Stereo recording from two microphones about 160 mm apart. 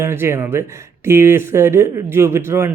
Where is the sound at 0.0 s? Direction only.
15° right (ahead or behind).